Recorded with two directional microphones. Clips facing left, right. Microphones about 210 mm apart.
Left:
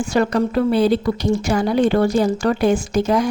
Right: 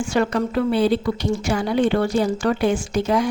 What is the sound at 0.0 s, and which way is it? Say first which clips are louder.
A woman's voice: left 3 dB; 40° left (ahead or behind).